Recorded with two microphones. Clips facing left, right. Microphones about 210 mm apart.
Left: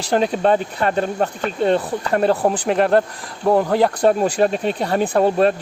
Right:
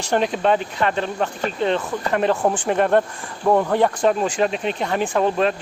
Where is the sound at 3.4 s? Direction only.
35° left (ahead or behind).